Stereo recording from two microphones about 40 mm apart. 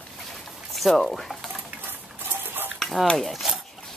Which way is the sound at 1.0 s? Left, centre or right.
Centre.